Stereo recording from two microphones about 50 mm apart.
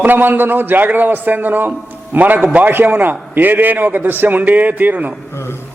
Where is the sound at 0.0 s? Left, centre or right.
Right.